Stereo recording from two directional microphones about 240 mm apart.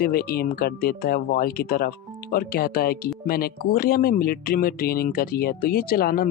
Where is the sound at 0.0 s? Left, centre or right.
Left.